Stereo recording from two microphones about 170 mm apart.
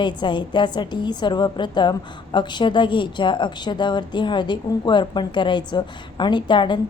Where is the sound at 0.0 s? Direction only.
30° left (ahead or behind).